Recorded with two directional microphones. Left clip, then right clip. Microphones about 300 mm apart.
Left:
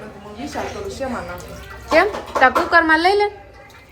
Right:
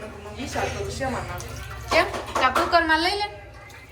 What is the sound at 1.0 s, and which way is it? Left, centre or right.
Speech, left.